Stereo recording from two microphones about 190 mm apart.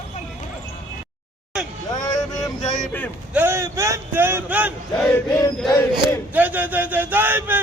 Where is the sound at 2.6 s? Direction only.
40° left (ahead or behind).